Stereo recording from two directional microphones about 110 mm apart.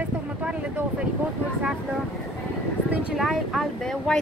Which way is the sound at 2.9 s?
10° right (ahead or behind).